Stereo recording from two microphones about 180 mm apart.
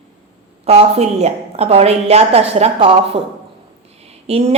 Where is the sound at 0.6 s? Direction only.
35° right (ahead or behind).